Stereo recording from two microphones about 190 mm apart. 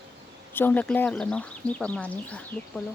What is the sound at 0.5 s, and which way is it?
Speech, 10° left (ahead or behind).